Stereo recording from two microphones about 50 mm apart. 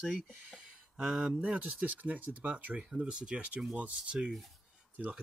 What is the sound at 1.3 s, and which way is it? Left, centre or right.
Speech, right.